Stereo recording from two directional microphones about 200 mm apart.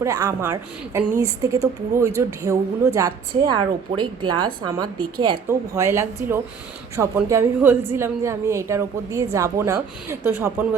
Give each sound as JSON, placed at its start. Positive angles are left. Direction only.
{"t": 0.0, "sound": "a woman's voice", "side_deg": -15}